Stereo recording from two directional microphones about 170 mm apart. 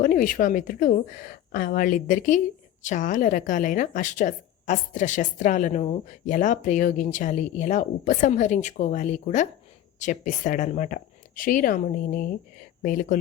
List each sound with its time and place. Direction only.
0.0 s a woman's voice: 55° left (ahead or behind)